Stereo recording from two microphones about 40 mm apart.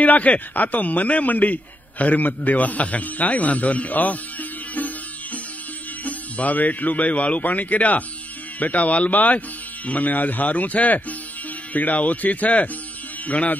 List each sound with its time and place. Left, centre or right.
0.0 s a man's voice: left
9.1 s speech: left